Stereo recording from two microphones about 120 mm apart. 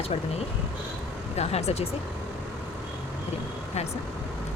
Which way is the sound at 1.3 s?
65° left (ahead or behind).